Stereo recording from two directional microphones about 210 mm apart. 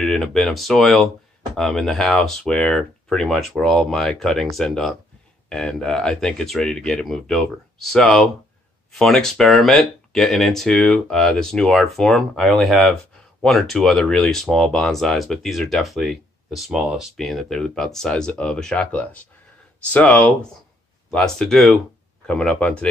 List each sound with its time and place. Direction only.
0.0 s speech: centre (ahead or behind)